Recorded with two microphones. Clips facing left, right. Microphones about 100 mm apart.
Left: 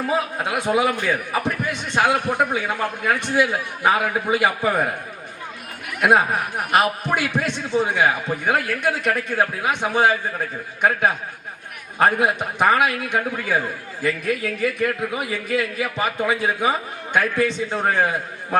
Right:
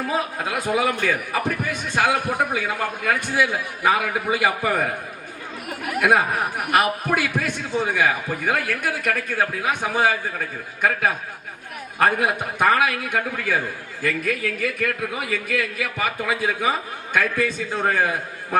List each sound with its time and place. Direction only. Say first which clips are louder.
0.1 s a man's voice: left 2 dB; 20° left (ahead or behind)
6.0 s a man's voice: left 2 dB; 20° left (ahead or behind)